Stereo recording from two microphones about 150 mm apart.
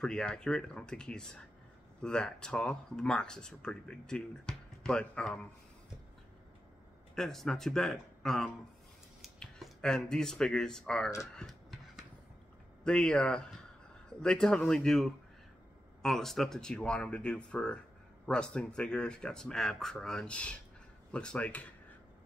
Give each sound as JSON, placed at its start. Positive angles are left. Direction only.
{"t": 0.0, "sound": "speech", "side_deg": 5}
{"t": 7.2, "sound": "speech", "side_deg": 5}
{"t": 12.8, "sound": "speech", "side_deg": 5}